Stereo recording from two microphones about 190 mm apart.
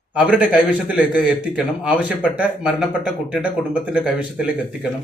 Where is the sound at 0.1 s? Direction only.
5° right (ahead or behind).